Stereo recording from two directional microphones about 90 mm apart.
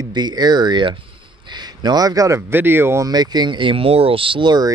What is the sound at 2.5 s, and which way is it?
Speech, 25° right (ahead or behind).